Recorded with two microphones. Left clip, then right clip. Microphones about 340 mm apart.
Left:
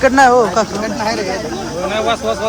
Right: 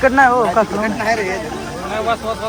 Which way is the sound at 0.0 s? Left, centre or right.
Centre.